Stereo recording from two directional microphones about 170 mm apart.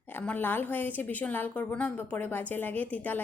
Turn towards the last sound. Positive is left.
turn(degrees=10)  # may be behind; listen again after turning